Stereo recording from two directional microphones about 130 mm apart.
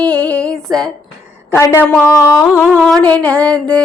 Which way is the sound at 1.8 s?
10° left (ahead or behind).